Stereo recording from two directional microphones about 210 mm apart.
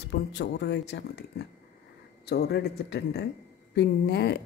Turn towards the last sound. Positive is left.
turn(degrees=55)  # may be behind; listen again after turning